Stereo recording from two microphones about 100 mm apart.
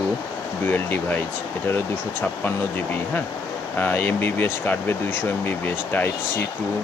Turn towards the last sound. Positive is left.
turn(degrees=20)  # may be behind; listen again after turning